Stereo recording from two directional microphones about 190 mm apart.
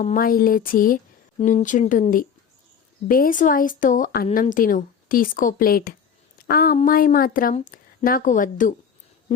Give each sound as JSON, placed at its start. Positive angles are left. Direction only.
{"t": 0.0, "sound": "speech", "side_deg": 45}